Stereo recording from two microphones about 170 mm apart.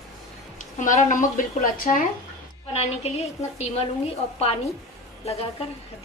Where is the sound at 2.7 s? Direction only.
40° left (ahead or behind).